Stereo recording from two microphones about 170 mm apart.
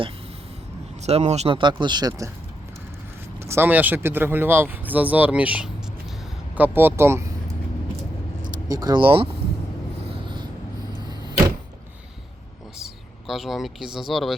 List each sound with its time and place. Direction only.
1.0 s speech: 40° right (ahead or behind); by 2.3 s 20° right (ahead or behind)
3.4 s speech: 15° right (ahead or behind)
8.7 s speech: 20° right (ahead or behind)
12.8 s speech: centre (ahead or behind)